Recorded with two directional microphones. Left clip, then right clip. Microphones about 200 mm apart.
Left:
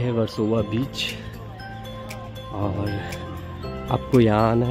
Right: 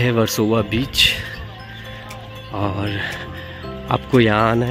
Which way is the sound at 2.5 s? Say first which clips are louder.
Right 5 dB; centre (ahead or behind).